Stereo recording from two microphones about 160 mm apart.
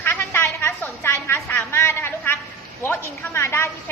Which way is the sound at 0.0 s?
15° left (ahead or behind).